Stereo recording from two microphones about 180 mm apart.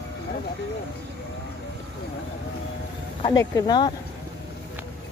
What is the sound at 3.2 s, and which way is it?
Speech, 20° left (ahead or behind).